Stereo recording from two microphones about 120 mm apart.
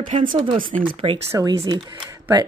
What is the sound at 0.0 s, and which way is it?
Speech, 45° right (ahead or behind).